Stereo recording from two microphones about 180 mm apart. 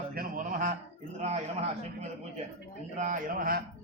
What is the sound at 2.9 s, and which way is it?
Speech, 45° right (ahead or behind).